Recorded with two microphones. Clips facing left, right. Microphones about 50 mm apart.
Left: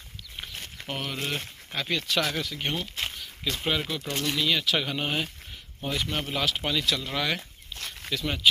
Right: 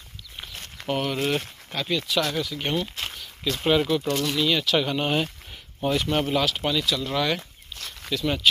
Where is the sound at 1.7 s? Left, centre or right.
Left.